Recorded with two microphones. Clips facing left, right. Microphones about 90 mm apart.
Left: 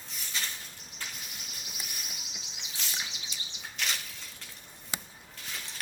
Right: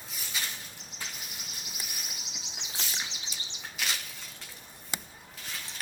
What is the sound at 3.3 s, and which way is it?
Bird flight, 20° right (ahead or behind).